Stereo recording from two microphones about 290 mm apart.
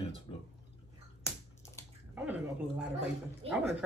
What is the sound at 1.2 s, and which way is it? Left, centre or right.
Finger snapping, centre.